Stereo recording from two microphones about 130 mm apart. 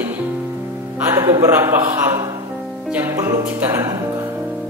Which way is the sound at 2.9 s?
15° right (ahead or behind).